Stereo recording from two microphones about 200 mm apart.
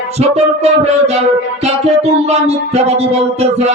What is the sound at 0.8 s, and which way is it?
Music, 30° right (ahead or behind).